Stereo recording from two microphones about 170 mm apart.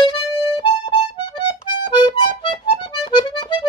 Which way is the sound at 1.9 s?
25° left (ahead or behind).